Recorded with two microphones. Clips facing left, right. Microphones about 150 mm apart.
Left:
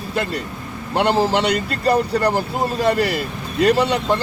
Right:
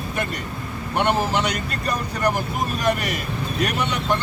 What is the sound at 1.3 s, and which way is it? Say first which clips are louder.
Speech: left 5 dB; 75° left (ahead or behind).